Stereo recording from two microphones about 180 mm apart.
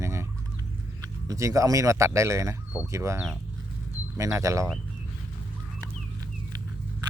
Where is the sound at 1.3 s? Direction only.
15° right (ahead or behind).